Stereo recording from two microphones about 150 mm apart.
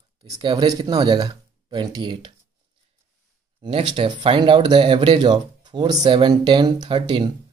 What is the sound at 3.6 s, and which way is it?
Speech, 35° right (ahead or behind).